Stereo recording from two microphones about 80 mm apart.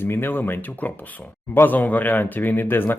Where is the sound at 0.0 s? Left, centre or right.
Left.